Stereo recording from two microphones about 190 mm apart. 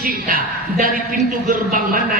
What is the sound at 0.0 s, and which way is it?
Speech, 50° right (ahead or behind).